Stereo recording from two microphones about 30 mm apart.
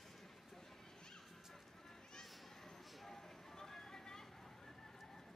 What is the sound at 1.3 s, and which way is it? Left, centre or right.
Music, centre.